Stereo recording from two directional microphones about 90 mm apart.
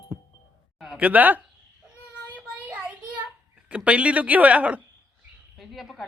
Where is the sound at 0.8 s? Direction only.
10° right (ahead or behind).